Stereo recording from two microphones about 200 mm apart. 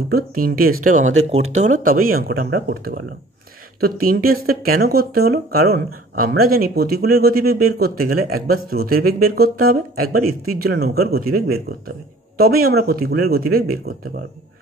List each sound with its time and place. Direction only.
0.1 s speech: 45° right (ahead or behind)